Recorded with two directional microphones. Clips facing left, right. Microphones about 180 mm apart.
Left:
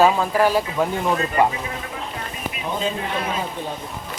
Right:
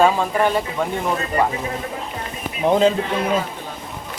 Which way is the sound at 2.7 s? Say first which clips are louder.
Right 10 dB; 80° right.